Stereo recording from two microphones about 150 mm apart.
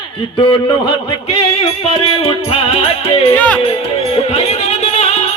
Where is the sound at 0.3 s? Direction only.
35° left (ahead or behind).